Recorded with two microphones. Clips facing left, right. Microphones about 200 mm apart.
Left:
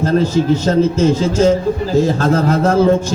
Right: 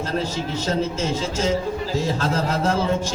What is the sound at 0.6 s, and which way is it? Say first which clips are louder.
A man's voice: left 10 dB; 55° left (ahead or behind).